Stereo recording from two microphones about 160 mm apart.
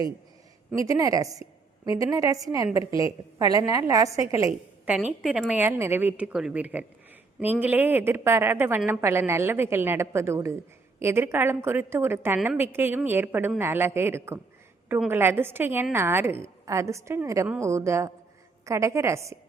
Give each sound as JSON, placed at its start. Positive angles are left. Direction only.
{"t": 0.9, "sound": "a woman's voice", "side_deg": -20}
{"t": 5.2, "sound": "a woman's voice", "side_deg": -5}